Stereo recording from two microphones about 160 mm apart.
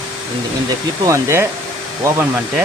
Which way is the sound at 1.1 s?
15° right (ahead or behind).